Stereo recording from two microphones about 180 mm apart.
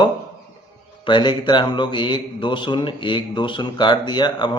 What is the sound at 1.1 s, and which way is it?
A man's voice, 25° left (ahead or behind).